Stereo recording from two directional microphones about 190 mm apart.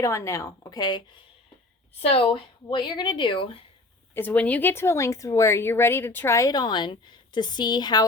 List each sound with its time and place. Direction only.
0.0 s a woman's voice: 15° left (ahead or behind)
4.1 s speech: 10° left (ahead or behind)